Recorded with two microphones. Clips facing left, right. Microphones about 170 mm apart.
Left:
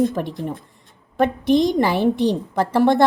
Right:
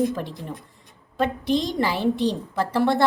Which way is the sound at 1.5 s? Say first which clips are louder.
Left 7 dB; 20° left (ahead or behind).